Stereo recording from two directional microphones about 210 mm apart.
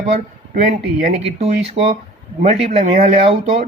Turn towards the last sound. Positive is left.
turn(degrees=-30)  # may be behind; listen again after turning